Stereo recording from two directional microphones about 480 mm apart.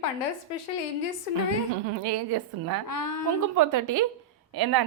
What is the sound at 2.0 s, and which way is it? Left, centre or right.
Speech, right.